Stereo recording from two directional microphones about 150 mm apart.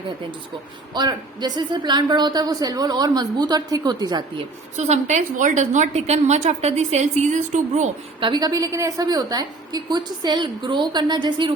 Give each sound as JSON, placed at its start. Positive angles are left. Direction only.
{"t": 0.9, "sound": "a woman's voice", "side_deg": -30}
{"t": 4.8, "sound": "a woman's voice", "side_deg": -50}
{"t": 8.2, "sound": "a woman's voice", "side_deg": -30}